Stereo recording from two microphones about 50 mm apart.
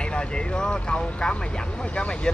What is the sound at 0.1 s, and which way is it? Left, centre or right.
Speech, centre.